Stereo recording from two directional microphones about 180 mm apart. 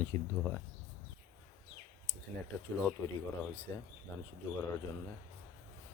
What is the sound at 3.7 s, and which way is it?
Speech, 15° left (ahead or behind).